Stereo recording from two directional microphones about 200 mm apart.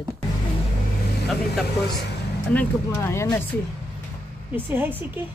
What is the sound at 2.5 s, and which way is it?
Speech, 10° left (ahead or behind).